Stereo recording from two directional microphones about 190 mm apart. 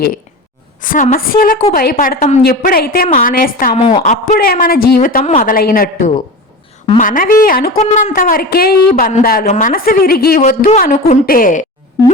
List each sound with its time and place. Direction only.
0.8 s speech: 45° left (ahead or behind)
3.8 s a woman's voice: 30° left (ahead or behind)
4.4 s speech: 50° left (ahead or behind)